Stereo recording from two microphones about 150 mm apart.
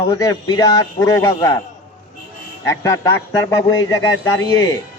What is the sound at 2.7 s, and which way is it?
A man's voice, 20° left (ahead or behind).